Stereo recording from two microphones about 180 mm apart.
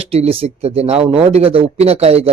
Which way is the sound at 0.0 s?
35° right (ahead or behind).